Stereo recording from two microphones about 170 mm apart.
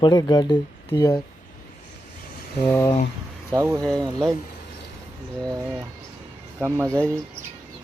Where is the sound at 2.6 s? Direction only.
15° left (ahead or behind).